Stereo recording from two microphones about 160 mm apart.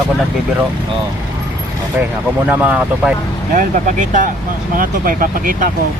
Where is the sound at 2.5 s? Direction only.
10° right (ahead or behind).